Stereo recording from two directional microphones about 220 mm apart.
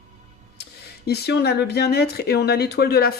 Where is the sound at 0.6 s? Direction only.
45° left (ahead or behind).